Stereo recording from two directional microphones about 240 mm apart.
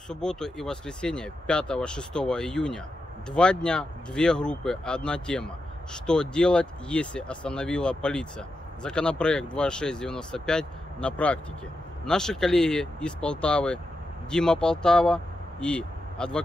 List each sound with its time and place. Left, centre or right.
0.1 s speech: centre